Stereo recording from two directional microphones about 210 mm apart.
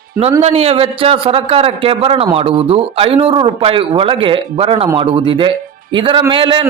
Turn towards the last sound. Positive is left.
turn(degrees=-25)  # may be behind; listen again after turning